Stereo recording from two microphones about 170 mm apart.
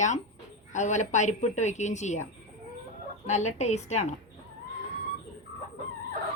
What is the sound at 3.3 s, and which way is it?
Speech, 40° left (ahead or behind).